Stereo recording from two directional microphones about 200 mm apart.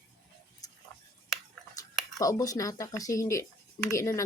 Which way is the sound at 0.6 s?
20° left (ahead or behind).